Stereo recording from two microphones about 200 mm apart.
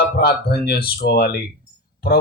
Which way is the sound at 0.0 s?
50° left (ahead or behind).